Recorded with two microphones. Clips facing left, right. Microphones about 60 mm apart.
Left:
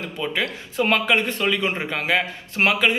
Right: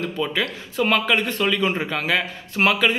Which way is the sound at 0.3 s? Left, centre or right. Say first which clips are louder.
Even; left.